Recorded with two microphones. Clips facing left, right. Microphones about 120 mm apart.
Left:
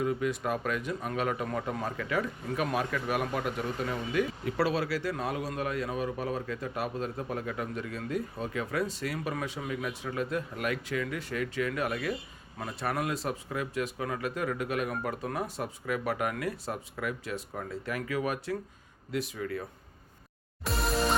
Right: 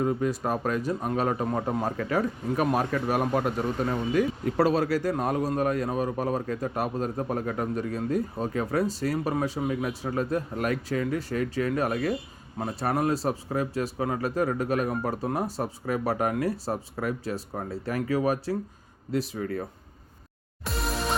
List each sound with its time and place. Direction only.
0.0 s speech: 35° right (ahead or behind)
20.7 s music: centre (ahead or behind)